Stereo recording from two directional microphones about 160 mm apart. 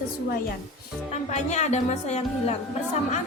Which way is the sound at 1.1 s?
45° left (ahead or behind).